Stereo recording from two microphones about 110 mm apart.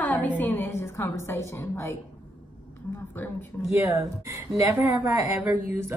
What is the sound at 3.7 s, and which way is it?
Speech, 25° right (ahead or behind).